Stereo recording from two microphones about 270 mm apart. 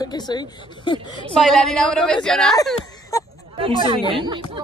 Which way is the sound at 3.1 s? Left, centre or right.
Centre.